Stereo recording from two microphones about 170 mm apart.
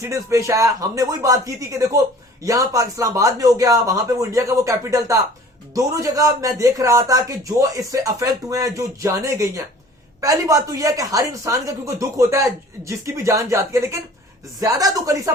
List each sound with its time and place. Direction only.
0.0 s speech: 20° right (ahead or behind)